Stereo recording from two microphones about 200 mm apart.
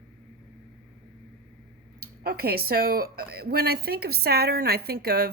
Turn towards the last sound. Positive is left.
turn(degrees=-50)  # may be behind; listen again after turning